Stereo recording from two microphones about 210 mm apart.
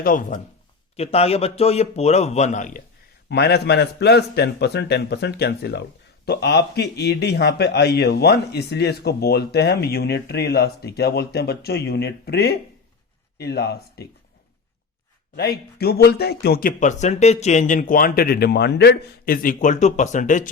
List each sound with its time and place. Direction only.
0.0 s a man's voice: 40° left (ahead or behind)
0.9 s a man's voice: 30° left (ahead or behind)
3.2 s a man's voice: 50° left (ahead or behind)
15.4 s a man's voice: 50° left (ahead or behind)